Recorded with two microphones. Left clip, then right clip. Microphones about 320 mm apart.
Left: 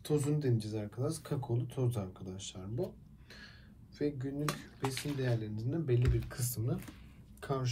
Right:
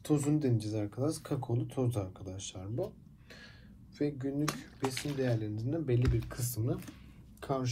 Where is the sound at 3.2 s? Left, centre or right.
Centre.